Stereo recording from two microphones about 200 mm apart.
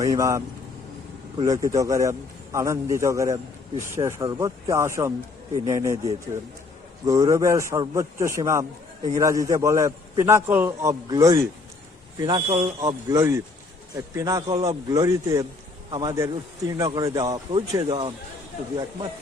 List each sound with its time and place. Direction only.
0.0 s a man's voice: 15° right (ahead or behind)
7.0 s a man's voice: 15° right (ahead or behind)
13.1 s a man's voice: 15° right (ahead or behind)